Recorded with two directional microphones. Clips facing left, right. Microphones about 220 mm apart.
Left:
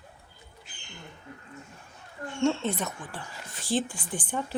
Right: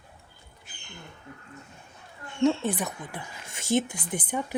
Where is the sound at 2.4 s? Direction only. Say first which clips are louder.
Right 2 dB; 15° right (ahead or behind).